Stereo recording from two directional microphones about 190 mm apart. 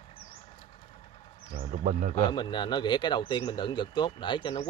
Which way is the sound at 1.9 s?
45° right (ahead or behind).